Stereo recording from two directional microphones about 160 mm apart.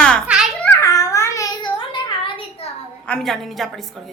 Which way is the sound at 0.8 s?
20° left (ahead or behind).